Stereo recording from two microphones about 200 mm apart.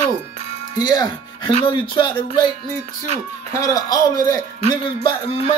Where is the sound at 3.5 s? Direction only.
15° left (ahead or behind).